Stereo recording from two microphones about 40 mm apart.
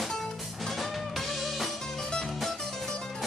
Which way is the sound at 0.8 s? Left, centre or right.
Centre.